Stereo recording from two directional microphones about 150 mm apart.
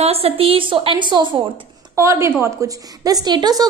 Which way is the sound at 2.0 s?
20° right (ahead or behind).